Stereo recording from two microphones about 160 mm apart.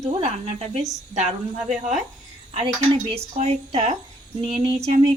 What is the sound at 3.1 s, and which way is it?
A woman's voice, 40° right (ahead or behind).